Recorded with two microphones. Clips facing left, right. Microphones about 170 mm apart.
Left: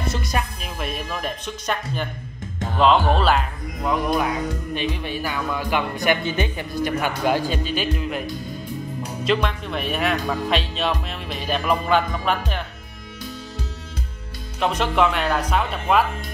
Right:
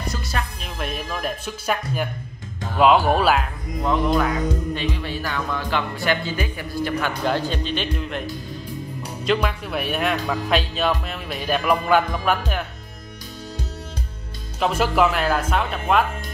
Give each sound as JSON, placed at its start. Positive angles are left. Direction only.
{"t": 0.1, "sound": "speech", "side_deg": 15}
{"t": 0.6, "sound": "speech", "side_deg": 0}
{"t": 3.8, "sound": "speech", "side_deg": 10}
{"t": 14.6, "sound": "speech", "side_deg": -5}